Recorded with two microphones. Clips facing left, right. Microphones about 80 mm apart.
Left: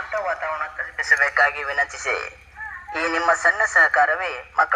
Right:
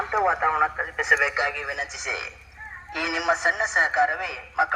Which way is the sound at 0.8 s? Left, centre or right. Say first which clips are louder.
Left 1 dB; centre.